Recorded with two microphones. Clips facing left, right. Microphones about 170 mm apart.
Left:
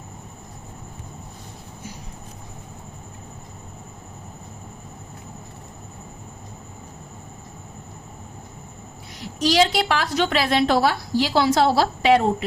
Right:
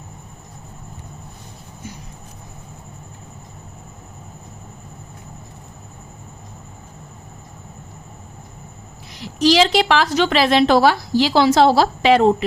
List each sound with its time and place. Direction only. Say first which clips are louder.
9.2 s a woman's voice: right 4 dB; 90° right